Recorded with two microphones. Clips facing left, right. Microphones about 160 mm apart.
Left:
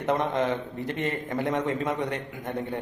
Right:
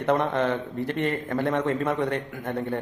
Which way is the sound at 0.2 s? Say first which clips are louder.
Right 2 dB; 15° left (ahead or behind).